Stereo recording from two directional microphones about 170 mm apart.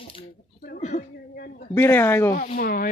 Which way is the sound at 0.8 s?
45° left (ahead or behind).